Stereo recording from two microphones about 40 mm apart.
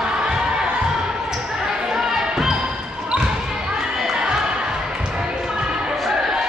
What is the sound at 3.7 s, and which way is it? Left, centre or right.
Basketball bounce, centre.